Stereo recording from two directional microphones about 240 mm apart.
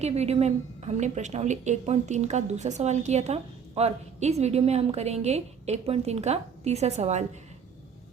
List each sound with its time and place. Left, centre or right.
0.0 s a woman's voice: right